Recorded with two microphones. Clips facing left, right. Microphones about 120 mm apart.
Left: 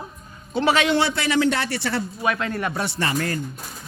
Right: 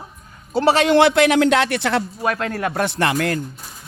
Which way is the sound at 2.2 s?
40° right (ahead or behind).